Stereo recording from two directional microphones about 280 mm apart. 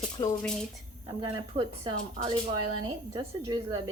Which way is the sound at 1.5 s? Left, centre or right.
Centre.